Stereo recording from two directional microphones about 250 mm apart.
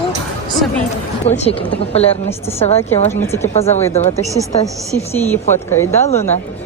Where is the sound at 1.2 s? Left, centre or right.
Left.